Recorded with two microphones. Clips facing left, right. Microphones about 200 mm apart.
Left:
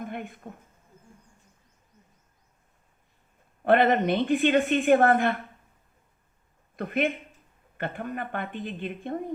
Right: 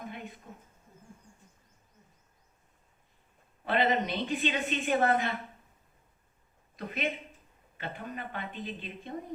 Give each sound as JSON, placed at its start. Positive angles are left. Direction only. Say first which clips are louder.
{"t": 0.0, "sound": "a sound", "louder": "left 6 dB", "side_deg": 55}
{"t": 3.6, "sound": "a woman's voice", "louder": "left 7 dB", "side_deg": 55}
{"t": 6.7, "sound": "a woman's voice", "louder": "left 7 dB", "side_deg": 55}